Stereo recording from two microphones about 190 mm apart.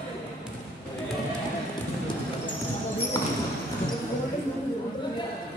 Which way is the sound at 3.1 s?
15° left (ahead or behind).